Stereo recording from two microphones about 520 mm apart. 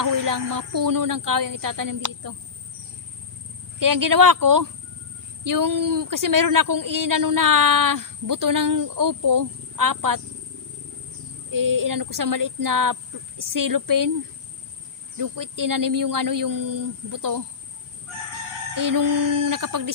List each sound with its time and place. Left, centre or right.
0.0 s speech: right
3.8 s speech: right
11.5 s speech: right
15.2 s speech: right
18.7 s speech: right